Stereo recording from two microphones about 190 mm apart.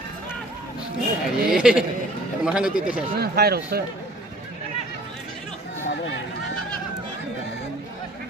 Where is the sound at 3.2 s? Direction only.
55° right (ahead or behind).